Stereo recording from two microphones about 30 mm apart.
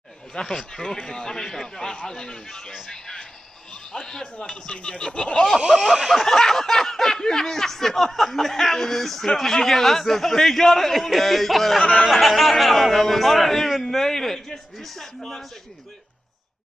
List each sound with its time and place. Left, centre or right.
0.3 s speech: centre
3.9 s speech: centre
5.1 s a sound: left
5.9 s a man's voice: centre
6.2 s a man's voice: centre
11.8 s speech: left
12.1 s a man's voice: centre